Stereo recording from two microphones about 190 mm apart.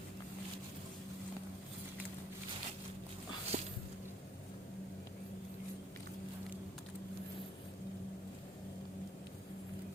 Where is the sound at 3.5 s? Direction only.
40° right (ahead or behind).